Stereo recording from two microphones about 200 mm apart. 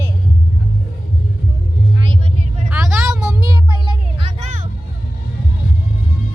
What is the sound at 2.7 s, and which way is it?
Vehicle, 5° right (ahead or behind).